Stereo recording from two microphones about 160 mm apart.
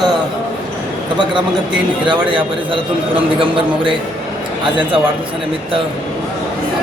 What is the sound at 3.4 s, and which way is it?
Speech, 35° right (ahead or behind).